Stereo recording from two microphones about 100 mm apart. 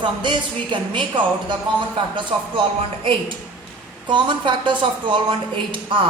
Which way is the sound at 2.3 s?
65° right (ahead or behind).